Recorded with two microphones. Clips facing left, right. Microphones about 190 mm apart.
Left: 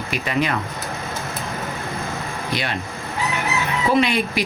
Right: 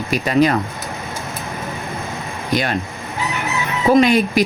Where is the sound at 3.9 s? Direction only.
45° right (ahead or behind).